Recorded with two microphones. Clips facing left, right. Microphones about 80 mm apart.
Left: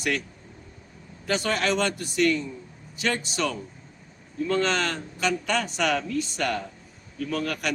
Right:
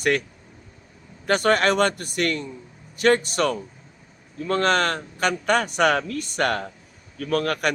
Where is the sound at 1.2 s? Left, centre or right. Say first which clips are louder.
Right 6 dB; right.